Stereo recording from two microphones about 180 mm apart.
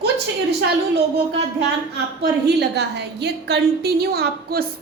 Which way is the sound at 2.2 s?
65° right (ahead or behind).